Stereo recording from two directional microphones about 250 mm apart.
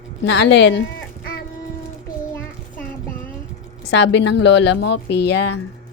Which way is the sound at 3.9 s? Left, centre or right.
Left.